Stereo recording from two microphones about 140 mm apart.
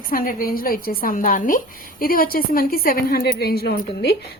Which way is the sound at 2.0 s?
90° left.